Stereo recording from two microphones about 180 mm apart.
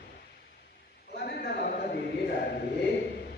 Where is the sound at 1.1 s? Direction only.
60° left (ahead or behind).